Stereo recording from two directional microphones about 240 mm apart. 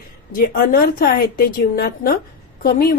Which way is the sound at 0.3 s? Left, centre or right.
Left.